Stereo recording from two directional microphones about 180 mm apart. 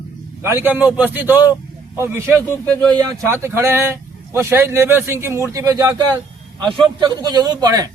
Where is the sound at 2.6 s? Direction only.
5° left (ahead or behind).